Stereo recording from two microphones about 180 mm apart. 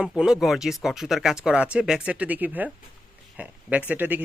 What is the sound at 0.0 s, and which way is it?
Speech, 5° right (ahead or behind).